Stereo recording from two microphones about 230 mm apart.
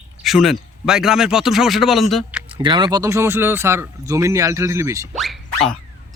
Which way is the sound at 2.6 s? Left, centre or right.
Centre.